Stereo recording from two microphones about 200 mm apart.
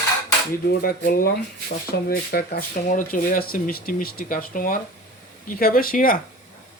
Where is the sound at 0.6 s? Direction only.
50° left (ahead or behind).